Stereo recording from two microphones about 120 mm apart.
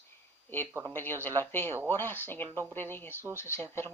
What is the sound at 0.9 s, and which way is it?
Speech, 15° left (ahead or behind).